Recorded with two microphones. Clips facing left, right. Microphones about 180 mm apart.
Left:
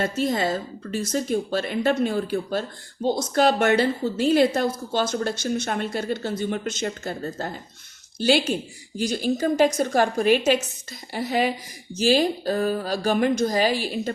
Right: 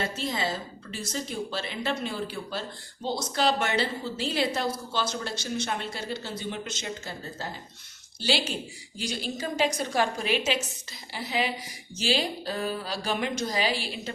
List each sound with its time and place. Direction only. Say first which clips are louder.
0.0 s speech: left 7 dB; 50° left (ahead or behind)